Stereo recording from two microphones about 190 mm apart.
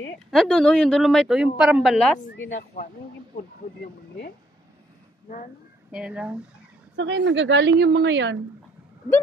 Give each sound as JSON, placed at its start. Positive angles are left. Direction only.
{"t": 0.3, "sound": "a woman's voice", "side_deg": 0}
{"t": 2.5, "sound": "speech", "side_deg": 40}
{"t": 5.9, "sound": "a woman's voice", "side_deg": -5}
{"t": 7.0, "sound": "a woman's voice", "side_deg": -80}